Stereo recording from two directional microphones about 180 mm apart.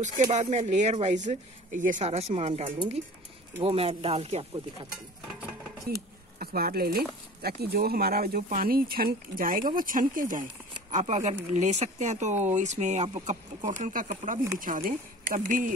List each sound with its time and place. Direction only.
0.0 s speech: 40° right (ahead or behind)
6.4 s speech: 55° right (ahead or behind)